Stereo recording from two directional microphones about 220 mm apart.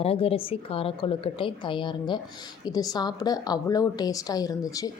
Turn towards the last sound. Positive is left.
turn(degrees=15)  # may be behind; listen again after turning